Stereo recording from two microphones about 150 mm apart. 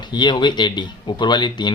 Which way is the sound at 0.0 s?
30° left (ahead or behind).